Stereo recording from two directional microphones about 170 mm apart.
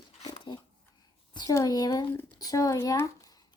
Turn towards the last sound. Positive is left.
turn(degrees=15)  # may be behind; listen again after turning